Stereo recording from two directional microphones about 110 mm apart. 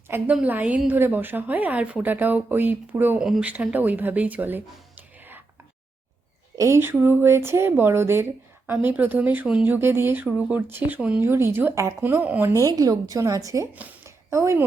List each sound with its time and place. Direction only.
0.1 s a woman's voice: 20° right (ahead or behind)
3.2 s speech: 5° right (ahead or behind)
6.6 s speech: 25° right (ahead or behind)
12.5 s a woman's voice: 30° right (ahead or behind)
13.7 s a sound: 25° right (ahead or behind)